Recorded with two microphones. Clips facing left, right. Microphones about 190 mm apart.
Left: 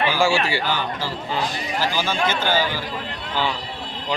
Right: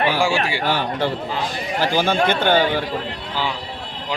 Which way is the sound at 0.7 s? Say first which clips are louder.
Right 5 dB; 65° right (ahead or behind).